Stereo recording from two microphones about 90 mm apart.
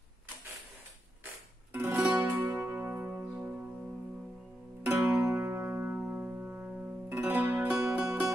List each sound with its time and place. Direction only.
1.7 s music: 25° right (ahead or behind)
2.0 s music: 15° right (ahead or behind)
4.8 s music: 25° right (ahead or behind)